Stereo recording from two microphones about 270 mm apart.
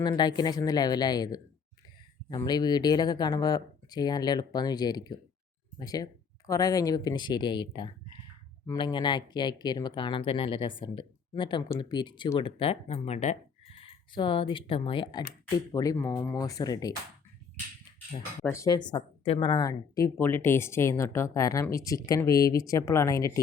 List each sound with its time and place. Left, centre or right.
0.0 s speech: centre
18.4 s speech: centre